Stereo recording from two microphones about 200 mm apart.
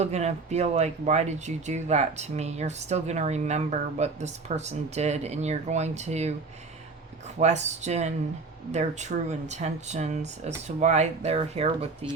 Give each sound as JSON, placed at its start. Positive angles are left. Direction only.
{"t": 0.0, "sound": "speech", "side_deg": -35}
{"t": 7.3, "sound": "speech", "side_deg": -35}